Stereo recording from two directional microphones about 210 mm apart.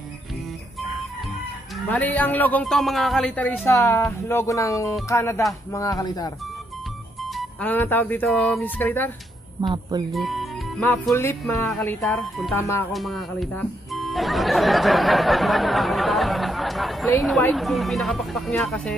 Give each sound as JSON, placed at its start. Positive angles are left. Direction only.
{"t": 1.9, "sound": "speech", "side_deg": 10}
{"t": 7.3, "sound": "speech", "side_deg": 10}
{"t": 9.6, "sound": "speech", "side_deg": -20}
{"t": 10.1, "sound": "music", "side_deg": 0}
{"t": 11.1, "sound": "speech", "side_deg": 10}
{"t": 12.9, "sound": "speech", "side_deg": 0}